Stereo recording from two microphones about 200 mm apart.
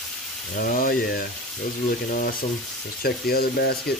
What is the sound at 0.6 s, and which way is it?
Speech, 45° left (ahead or behind).